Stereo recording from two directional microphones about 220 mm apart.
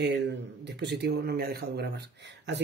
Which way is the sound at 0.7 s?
50° right (ahead or behind).